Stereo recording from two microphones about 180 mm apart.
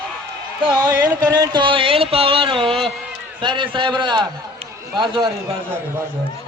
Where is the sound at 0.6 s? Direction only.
20° right (ahead or behind).